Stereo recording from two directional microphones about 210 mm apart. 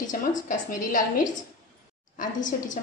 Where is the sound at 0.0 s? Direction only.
40° left (ahead or behind).